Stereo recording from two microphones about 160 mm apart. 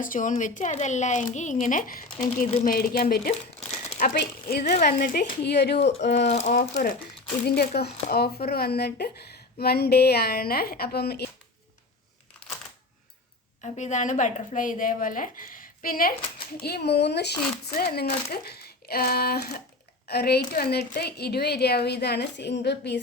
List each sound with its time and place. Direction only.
0.0 s a woman's voice: 55° left (ahead or behind)
3.6 s crumpling: 40° left (ahead or behind)
3.9 s a woman's voice: 70° left (ahead or behind); by 5.7 s 90° left
5.7 s speech: 40° left (ahead or behind)
6.0 s a woman's voice: 90° left
6.2 s a woman's voice: 45° left (ahead or behind)
6.5 s a woman's voice: 60° left (ahead or behind)
7.4 s a woman's voice: 80° left
13.6 s a woman's voice: 50° left (ahead or behind); by 16.1 s 65° left (ahead or behind)
16.6 s a woman's voice: 85° left
17.9 s a woman's voice: 75° left (ahead or behind)
20.1 s a woman's voice: 85° left